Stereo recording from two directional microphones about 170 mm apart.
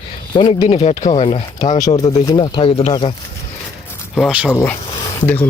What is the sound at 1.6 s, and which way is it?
Speech, 20° left (ahead or behind).